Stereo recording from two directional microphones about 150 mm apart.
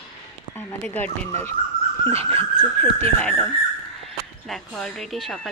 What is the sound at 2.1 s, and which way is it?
Dog, 40° right (ahead or behind).